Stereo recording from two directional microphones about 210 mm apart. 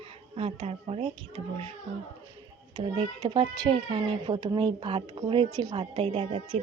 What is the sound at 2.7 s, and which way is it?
Speech, 20° right (ahead or behind).